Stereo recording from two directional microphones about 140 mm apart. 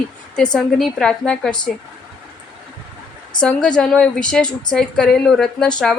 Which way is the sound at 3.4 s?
5° left (ahead or behind).